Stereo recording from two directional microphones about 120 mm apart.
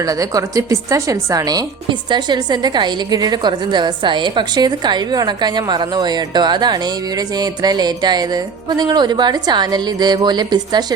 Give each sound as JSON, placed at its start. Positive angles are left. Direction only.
{"t": 0.0, "sound": "a woman's voice", "side_deg": -30}